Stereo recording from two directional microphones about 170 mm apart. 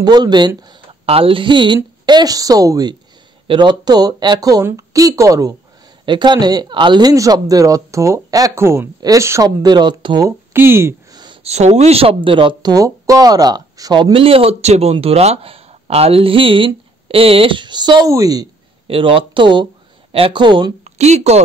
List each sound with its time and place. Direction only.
0.0 s speech: 25° right (ahead or behind)
10.5 s a sound: 15° right (ahead or behind)
11.4 s speech: 40° right (ahead or behind); by 18.5 s 20° right (ahead or behind)
18.9 s speech: 30° right (ahead or behind)
21.0 s speech: 40° right (ahead or behind)